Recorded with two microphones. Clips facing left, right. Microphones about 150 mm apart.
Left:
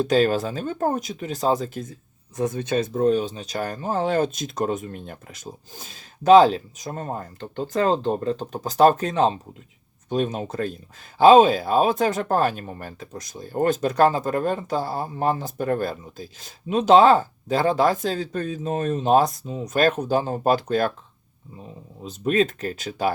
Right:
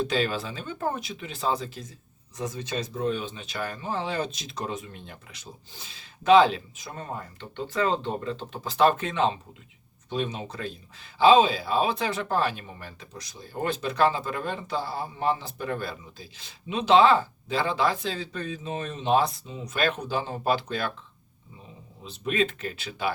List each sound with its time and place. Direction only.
0.0 s speech: 45° left (ahead or behind)
22.0 s speech: 40° left (ahead or behind)